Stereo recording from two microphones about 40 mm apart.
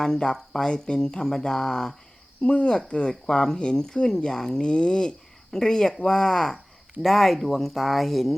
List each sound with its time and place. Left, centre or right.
0.0 s speech: centre
2.4 s speech: left; by 4.6 s centre
4.6 s speech: left; by 8.4 s centre